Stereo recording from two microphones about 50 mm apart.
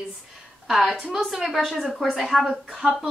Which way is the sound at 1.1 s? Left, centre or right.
Centre.